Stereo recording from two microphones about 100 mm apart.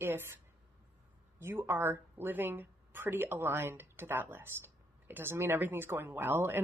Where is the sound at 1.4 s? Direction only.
25° right (ahead or behind).